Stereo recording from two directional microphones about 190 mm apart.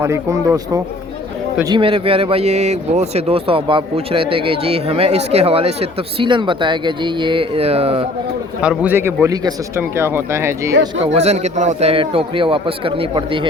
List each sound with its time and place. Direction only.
0.0 s speech: 15° right (ahead or behind)
1.7 s speech: 30° right (ahead or behind)
8.6 s speech: 5° right (ahead or behind)
11.0 s speech: 35° right (ahead or behind)